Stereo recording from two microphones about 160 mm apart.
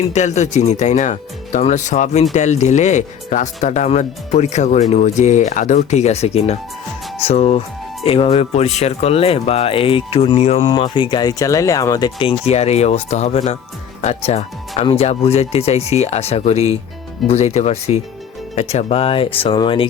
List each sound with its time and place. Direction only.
0.1 s speech: 45° left (ahead or behind)